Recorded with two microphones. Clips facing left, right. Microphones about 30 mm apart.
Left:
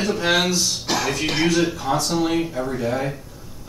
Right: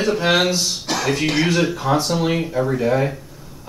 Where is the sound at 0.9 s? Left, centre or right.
Centre.